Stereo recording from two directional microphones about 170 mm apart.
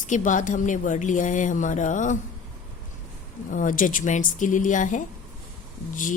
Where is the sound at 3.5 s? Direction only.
50° left (ahead or behind).